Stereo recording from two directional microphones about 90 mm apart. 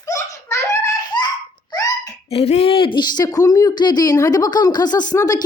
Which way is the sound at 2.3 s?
90° left.